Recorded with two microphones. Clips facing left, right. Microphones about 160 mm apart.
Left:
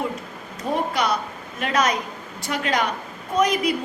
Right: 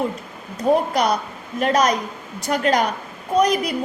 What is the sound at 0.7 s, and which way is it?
A woman's voice, 45° right (ahead or behind).